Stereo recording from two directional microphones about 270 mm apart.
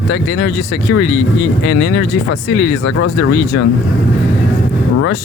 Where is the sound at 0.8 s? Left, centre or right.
Left.